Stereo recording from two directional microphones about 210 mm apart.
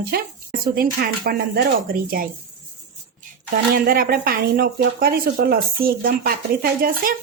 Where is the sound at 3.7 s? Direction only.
45° right (ahead or behind).